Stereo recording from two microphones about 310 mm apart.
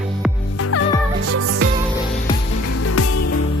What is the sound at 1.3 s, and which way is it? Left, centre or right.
Music, right.